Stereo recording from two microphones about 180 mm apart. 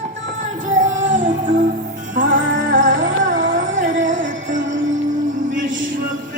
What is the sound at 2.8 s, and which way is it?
Music, 90° right.